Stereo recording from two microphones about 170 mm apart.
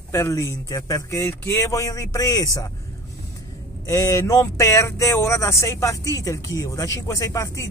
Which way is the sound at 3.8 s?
15° left (ahead or behind).